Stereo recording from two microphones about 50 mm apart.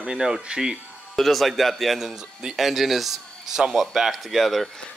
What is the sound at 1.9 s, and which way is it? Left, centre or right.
Speech, centre.